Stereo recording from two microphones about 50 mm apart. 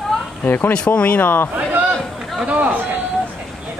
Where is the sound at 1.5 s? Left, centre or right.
Right.